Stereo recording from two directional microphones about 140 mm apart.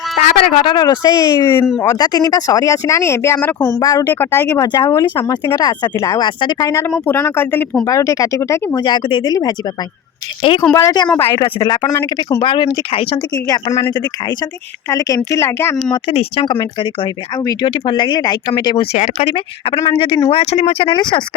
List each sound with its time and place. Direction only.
0.2 s speech: 55° left (ahead or behind)
0.6 s speech: 30° left (ahead or behind)
4.1 s speech: 15° left (ahead or behind)
4.6 s speech: 30° left (ahead or behind)
8.8 s speech: 35° left (ahead or behind)
10.6 s speech: 20° left (ahead or behind); by 13.1 s 40° left (ahead or behind)
13.8 s speech: 30° left (ahead or behind)
15.9 s speech: 40° left (ahead or behind)
17.4 s speech: 25° left (ahead or behind)
17.7 s speech: 35° left (ahead or behind)
18.9 s speech: 50° left (ahead or behind); by 21.2 s 35° left (ahead or behind)